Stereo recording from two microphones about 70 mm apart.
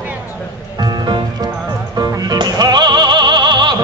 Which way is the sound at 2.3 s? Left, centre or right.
Right.